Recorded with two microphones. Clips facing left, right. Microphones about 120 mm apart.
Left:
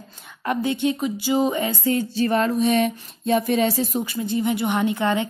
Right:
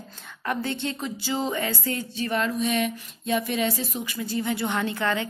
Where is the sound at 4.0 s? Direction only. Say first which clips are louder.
Left 5 dB; 25° left (ahead or behind).